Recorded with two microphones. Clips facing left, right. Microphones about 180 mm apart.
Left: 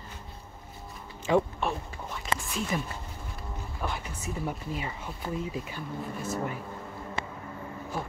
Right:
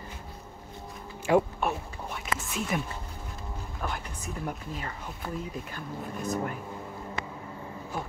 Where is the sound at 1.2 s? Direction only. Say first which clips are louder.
Right 1 dB; 5° right (ahead or behind).